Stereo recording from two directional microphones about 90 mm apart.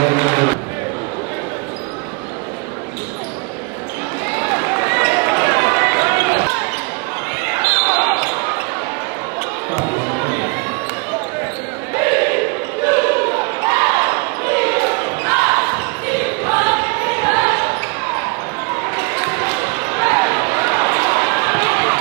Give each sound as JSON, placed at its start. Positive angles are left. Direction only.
{"t": 0.0, "sound": "music", "side_deg": -15}
{"t": 4.3, "sound": "run", "side_deg": -15}
{"t": 7.4, "sound": "basketball bounce", "side_deg": -15}
{"t": 9.7, "sound": "chatter", "side_deg": -15}
{"t": 11.9, "sound": "basketball bounce", "side_deg": -15}